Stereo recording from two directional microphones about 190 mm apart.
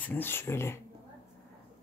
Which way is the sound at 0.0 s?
10° left (ahead or behind).